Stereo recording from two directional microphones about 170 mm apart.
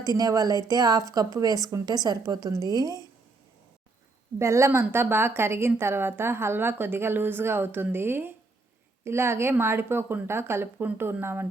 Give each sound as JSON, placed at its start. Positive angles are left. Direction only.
{"t": 0.0, "sound": "speech", "side_deg": -20}
{"t": 4.4, "sound": "a woman's voice", "side_deg": -15}